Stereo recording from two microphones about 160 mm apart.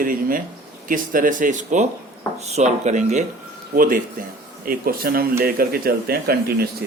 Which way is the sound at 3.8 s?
60° right (ahead or behind).